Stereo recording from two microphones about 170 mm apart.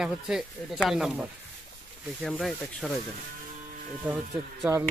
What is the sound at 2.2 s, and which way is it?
Speech, centre (ahead or behind).